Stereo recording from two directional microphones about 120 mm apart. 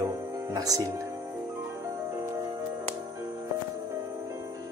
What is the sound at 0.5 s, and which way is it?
Speech, 30° right (ahead or behind).